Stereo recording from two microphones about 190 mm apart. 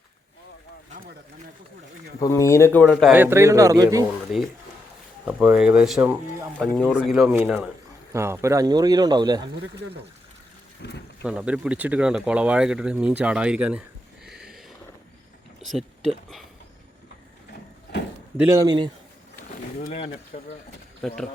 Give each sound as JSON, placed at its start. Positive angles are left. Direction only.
{"t": 2.2, "sound": "speech", "side_deg": 15}
{"t": 2.9, "sound": "a man's voice", "side_deg": -5}
{"t": 4.3, "sound": "a man's voice", "side_deg": 0}
{"t": 10.8, "sound": "speech", "side_deg": 65}
{"t": 11.3, "sound": "speech", "side_deg": -5}
{"t": 15.6, "sound": "speech", "side_deg": 0}
{"t": 18.3, "sound": "a man's voice", "side_deg": -15}
{"t": 20.3, "sound": "speech", "side_deg": 40}